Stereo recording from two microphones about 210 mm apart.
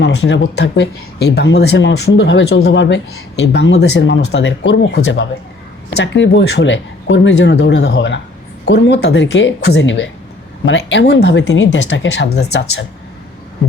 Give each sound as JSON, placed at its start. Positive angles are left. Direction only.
{"t": 0.0, "sound": "speech", "side_deg": 55}